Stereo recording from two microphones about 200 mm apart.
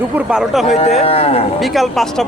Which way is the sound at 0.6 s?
35° left (ahead or behind).